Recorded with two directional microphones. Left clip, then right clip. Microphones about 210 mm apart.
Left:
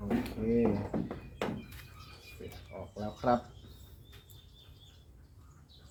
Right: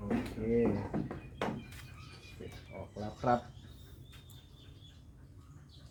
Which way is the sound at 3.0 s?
15° right (ahead or behind).